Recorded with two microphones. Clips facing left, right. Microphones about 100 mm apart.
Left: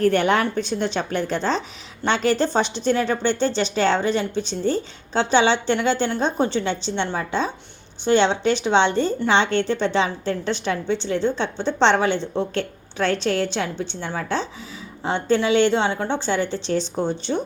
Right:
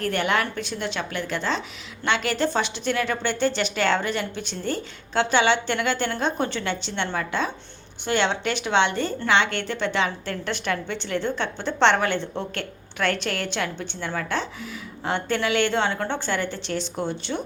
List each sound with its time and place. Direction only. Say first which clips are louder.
0.0 s speech: left 6 dB; 35° left (ahead or behind)
2.5 s a woman's voice: left 4 dB; 25° left (ahead or behind)
17.3 s speech: left 5 dB; 35° left (ahead or behind)